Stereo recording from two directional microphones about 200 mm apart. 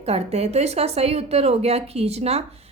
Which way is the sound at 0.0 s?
30° right (ahead or behind).